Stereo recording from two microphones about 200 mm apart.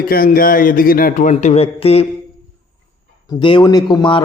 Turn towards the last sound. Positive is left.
turn(degrees=25)  # may be behind; listen again after turning